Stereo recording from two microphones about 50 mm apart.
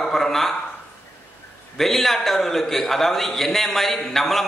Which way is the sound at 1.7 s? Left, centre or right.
Centre.